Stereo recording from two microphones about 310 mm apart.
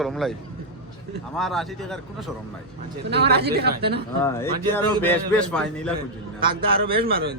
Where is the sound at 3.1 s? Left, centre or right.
Right.